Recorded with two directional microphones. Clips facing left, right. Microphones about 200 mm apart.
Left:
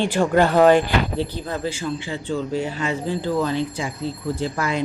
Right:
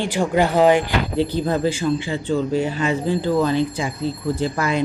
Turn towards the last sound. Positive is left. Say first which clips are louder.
# right 3 dB
turn(degrees=-15)  # may be behind; listen again after turning